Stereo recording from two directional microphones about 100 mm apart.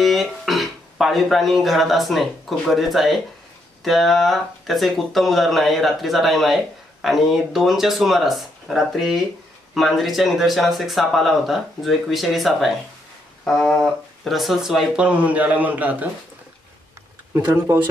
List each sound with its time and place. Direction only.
0.0 s speech: centre (ahead or behind)
17.3 s speech: 20° right (ahead or behind)